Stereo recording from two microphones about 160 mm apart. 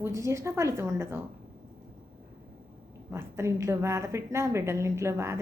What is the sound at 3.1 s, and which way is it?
A woman's voice, 15° right (ahead or behind).